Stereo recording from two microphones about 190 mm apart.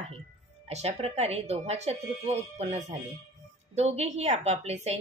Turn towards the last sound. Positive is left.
turn(degrees=-35)  # may be behind; listen again after turning